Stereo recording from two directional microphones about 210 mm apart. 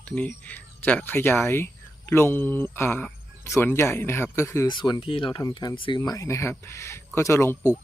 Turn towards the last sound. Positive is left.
turn(degrees=10)  # may be behind; listen again after turning